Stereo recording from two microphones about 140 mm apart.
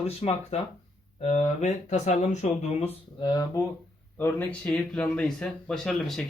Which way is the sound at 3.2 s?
30° left (ahead or behind).